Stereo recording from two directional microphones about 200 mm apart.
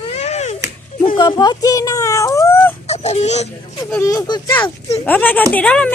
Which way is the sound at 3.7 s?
15° left (ahead or behind).